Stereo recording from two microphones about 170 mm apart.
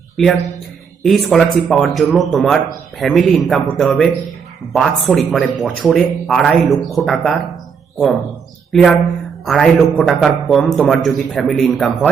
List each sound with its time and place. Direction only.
0.2 s a man's voice: centre (ahead or behind)
8.7 s a man's voice: centre (ahead or behind)